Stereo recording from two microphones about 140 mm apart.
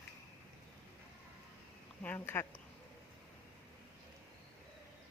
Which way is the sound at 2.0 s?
15° left (ahead or behind).